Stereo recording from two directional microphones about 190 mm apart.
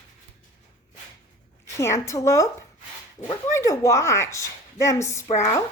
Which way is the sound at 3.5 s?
15° left (ahead or behind).